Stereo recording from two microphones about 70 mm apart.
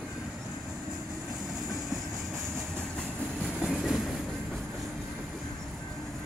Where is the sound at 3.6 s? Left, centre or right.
Centre.